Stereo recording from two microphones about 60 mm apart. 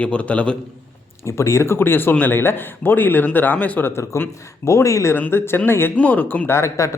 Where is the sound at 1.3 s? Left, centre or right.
Left.